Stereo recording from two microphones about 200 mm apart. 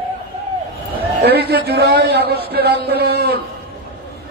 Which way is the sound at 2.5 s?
55° right (ahead or behind).